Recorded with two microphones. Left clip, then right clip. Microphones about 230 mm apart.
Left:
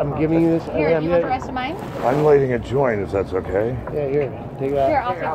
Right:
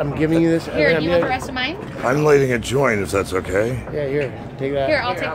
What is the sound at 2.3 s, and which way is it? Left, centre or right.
Speech, right.